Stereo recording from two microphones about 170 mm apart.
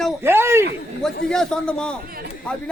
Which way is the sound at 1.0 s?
5° left (ahead or behind).